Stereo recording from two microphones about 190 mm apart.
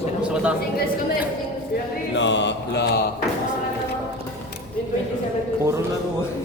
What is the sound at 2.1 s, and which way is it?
Mantra, 70° left (ahead or behind).